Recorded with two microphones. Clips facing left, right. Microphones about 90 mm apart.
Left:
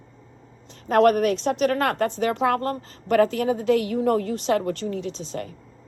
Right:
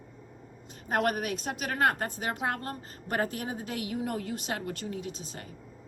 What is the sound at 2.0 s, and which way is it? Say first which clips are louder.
Speech: left 10 dB; 90° left.